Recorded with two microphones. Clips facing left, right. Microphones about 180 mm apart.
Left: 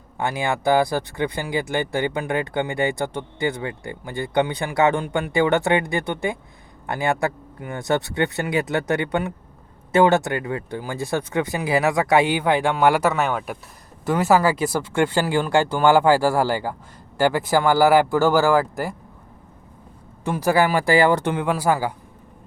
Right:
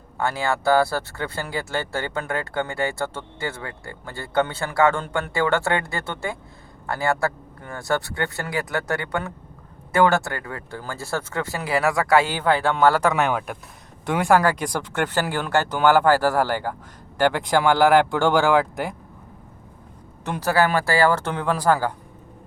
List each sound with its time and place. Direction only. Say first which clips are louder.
0.2 s speech: even; 20° left (ahead or behind); by 18.9 s centre (ahead or behind)
20.2 s speech: left 2 dB; 10° left (ahead or behind)